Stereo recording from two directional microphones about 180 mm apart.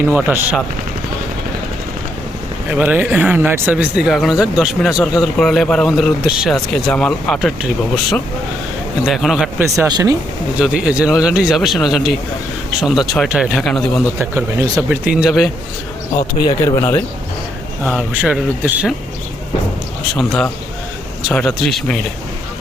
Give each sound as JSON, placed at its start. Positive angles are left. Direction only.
{"t": 0.2, "sound": "speech", "side_deg": -10}
{"t": 2.6, "sound": "speech", "side_deg": -10}
{"t": 9.0, "sound": "speech", "side_deg": 0}
{"t": 9.6, "sound": "speech", "side_deg": -15}
{"t": 10.6, "sound": "speech", "side_deg": -5}
{"t": 14.2, "sound": "speech", "side_deg": -15}
{"t": 16.4, "sound": "speech", "side_deg": 20}
{"t": 17.8, "sound": "speech", "side_deg": -5}
{"t": 20.1, "sound": "speech", "side_deg": 0}